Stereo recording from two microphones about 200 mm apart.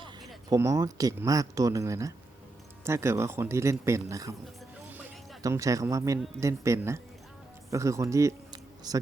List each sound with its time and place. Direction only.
0.5 s speech: 15° right (ahead or behind)
4.9 s music: 10° right (ahead or behind)
6.4 s a man's voice: 15° right (ahead or behind)